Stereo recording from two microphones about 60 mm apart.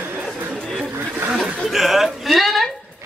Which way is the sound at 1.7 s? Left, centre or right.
Centre.